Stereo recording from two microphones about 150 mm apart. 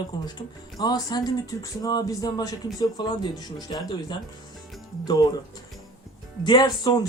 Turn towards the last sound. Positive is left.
turn(degrees=25)  # may be behind; listen again after turning